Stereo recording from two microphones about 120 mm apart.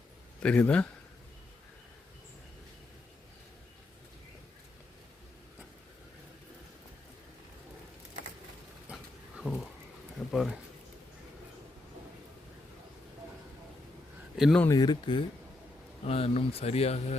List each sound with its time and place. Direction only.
0.4 s speech: 10° left (ahead or behind)
8.9 s a sound: 5° right (ahead or behind)
14.3 s speech: centre (ahead or behind)
14.7 s speech: 35° left (ahead or behind)
16.0 s speech: 55° left (ahead or behind)